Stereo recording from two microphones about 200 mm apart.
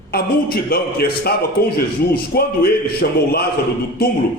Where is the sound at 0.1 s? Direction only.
50° left (ahead or behind).